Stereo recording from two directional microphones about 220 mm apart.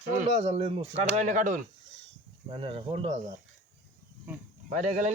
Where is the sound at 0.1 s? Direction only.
35° right (ahead or behind).